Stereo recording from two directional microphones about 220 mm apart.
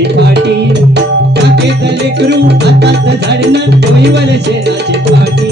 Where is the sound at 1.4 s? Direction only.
50° right (ahead or behind).